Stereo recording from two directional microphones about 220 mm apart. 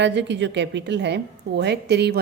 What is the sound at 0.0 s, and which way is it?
A woman's voice, 50° right (ahead or behind).